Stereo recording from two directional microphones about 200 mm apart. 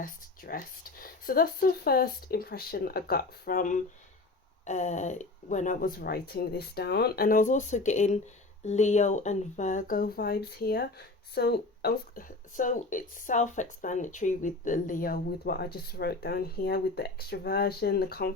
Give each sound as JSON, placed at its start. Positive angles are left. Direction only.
{"t": 0.0, "sound": "speech", "side_deg": 45}